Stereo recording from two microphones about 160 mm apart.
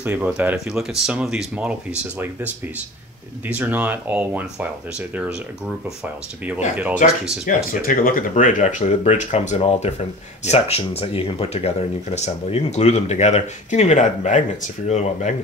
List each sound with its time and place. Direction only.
0.0 s speech: 10° right (ahead or behind)
7.0 s speech: 50° left (ahead or behind)